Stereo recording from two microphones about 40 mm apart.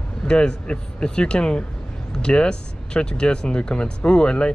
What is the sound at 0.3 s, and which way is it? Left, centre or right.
Speech, left.